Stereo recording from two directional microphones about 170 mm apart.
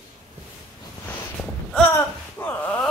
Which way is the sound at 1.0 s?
10° left (ahead or behind).